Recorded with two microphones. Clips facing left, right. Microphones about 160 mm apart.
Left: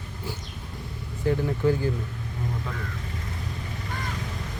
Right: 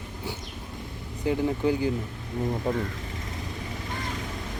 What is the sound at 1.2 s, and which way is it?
Speech, 15° right (ahead or behind).